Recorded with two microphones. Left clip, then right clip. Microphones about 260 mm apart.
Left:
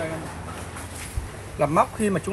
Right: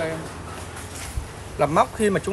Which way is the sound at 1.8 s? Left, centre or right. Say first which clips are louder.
Right 2 dB; centre.